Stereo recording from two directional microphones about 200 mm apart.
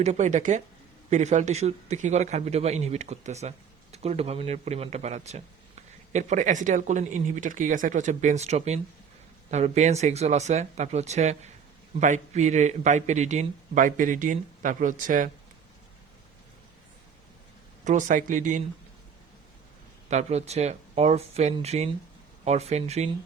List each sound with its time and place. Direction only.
0.0 s a man's voice: 35° right (ahead or behind)
17.8 s a man's voice: 40° right (ahead or behind)
20.1 s a man's voice: 35° right (ahead or behind)